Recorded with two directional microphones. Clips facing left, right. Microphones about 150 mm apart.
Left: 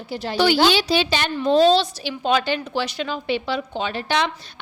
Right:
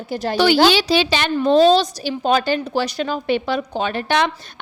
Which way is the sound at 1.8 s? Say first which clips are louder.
Right 4 dB; 40° right (ahead or behind).